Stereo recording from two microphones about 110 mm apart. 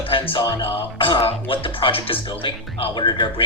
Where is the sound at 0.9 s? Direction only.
55° left (ahead or behind).